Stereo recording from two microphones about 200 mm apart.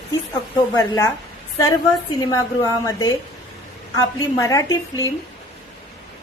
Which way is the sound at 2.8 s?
15° left (ahead or behind).